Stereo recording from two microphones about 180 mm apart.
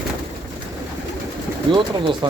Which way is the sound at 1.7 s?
25° right (ahead or behind).